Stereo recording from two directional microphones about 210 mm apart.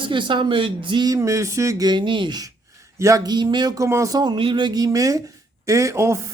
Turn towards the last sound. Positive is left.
turn(degrees=-15)  # may be behind; listen again after turning